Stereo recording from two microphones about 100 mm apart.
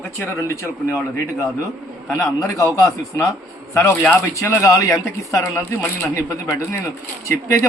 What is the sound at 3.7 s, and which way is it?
A woman's voice, 30° left (ahead or behind).